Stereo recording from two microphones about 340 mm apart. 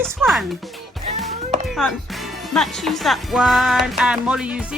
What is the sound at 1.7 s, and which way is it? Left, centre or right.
Speech, centre.